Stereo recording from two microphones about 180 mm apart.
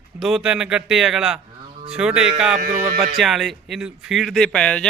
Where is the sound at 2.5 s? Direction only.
45° right (ahead or behind).